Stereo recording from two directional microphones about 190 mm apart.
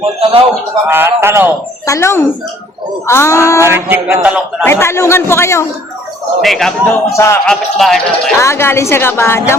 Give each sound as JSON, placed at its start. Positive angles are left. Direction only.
{"t": 0.0, "sound": "a man's voice", "side_deg": -30}
{"t": 0.9, "sound": "speech", "side_deg": -10}
{"t": 1.9, "sound": "a woman's voice", "side_deg": 15}
{"t": 3.6, "sound": "speech", "side_deg": -10}
{"t": 4.6, "sound": "a woman's voice", "side_deg": 15}
{"t": 6.4, "sound": "a man's voice", "side_deg": 0}
{"t": 7.1, "sound": "a woman's voice", "side_deg": 15}
{"t": 7.4, "sound": "a man's voice", "side_deg": 0}
{"t": 8.4, "sound": "a woman's voice", "side_deg": 15}